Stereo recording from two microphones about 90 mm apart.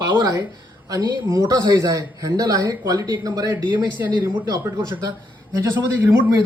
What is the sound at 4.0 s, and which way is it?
Speech, 20° right (ahead or behind).